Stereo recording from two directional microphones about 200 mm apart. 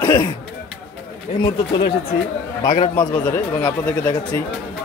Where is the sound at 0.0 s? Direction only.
15° left (ahead or behind).